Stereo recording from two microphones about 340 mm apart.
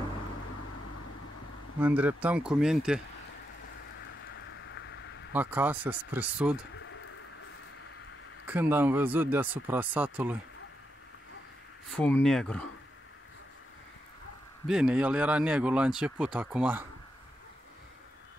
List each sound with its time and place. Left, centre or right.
1.8 s speech: centre
4.4 s a sound: left
5.3 s speech: centre
8.5 s speech: centre
11.9 s speech: centre
14.7 s speech: centre